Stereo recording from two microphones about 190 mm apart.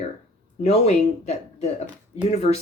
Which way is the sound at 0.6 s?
30° left (ahead or behind).